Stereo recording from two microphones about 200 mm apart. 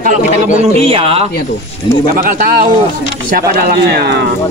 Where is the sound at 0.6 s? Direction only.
30° right (ahead or behind).